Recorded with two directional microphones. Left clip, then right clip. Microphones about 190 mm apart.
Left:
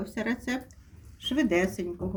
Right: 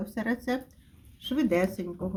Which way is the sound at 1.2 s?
20° right (ahead or behind).